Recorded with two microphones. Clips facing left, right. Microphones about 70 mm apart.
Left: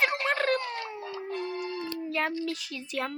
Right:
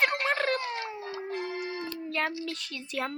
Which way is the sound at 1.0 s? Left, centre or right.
Right.